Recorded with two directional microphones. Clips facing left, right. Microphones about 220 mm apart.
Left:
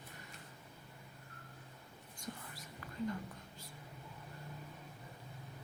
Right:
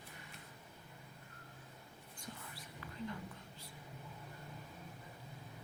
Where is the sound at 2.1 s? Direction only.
45° left (ahead or behind).